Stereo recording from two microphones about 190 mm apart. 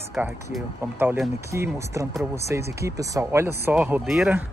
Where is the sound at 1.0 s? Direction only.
10° right (ahead or behind).